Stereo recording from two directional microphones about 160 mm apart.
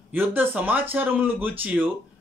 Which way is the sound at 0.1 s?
10° right (ahead or behind).